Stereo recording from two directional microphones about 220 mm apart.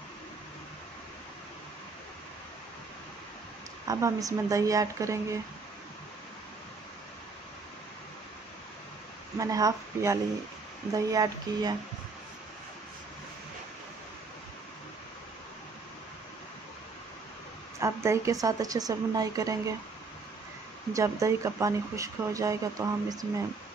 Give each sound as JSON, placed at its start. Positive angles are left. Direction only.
{"t": 3.8, "sound": "speech", "side_deg": -15}
{"t": 9.4, "sound": "speech", "side_deg": -15}
{"t": 17.7, "sound": "speech", "side_deg": -15}
{"t": 20.9, "sound": "speech", "side_deg": -15}